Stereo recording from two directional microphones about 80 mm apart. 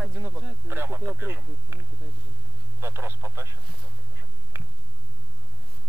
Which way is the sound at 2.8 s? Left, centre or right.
Right.